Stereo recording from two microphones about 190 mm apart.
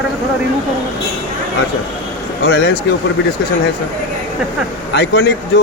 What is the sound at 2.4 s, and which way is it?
Speech, 65° left (ahead or behind).